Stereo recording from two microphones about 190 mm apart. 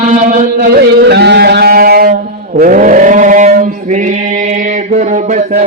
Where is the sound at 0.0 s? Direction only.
40° right (ahead or behind).